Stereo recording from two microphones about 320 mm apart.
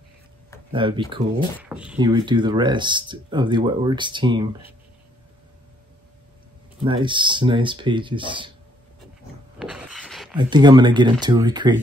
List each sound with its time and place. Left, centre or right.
0.7 s speech: centre
1.6 s speech: centre
6.8 s speech: centre
9.6 s a sound: centre
10.3 s speech: centre